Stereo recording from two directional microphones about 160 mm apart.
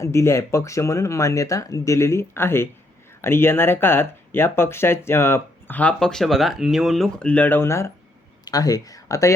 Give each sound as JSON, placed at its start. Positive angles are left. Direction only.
{"t": 0.0, "sound": "speech", "side_deg": 15}